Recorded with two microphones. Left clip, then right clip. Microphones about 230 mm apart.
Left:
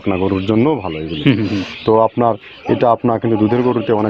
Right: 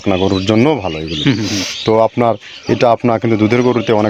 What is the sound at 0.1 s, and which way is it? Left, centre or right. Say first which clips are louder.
Speech: right 3 dB; right.